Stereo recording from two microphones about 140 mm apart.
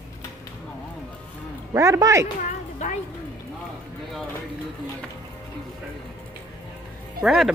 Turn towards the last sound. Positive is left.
turn(degrees=-5)  # may be behind; listen again after turning